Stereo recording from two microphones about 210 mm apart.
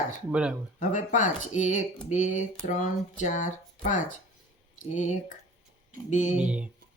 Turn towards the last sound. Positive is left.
turn(degrees=-5)  # may be behind; listen again after turning